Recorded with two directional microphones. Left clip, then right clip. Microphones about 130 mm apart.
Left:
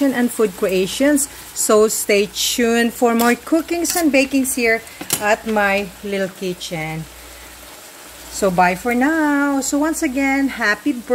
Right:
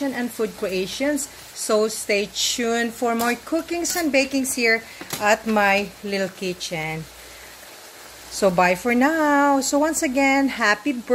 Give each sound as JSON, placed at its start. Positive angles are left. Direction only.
{"t": 0.0, "sound": "speech", "side_deg": 60}
{"t": 5.2, "sound": "speech", "side_deg": 5}
{"t": 8.3, "sound": "speech", "side_deg": 0}